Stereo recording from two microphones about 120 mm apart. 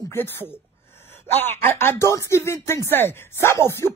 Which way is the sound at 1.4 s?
20° left (ahead or behind).